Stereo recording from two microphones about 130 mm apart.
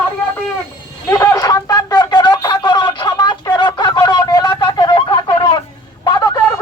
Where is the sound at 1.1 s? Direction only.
25° left (ahead or behind).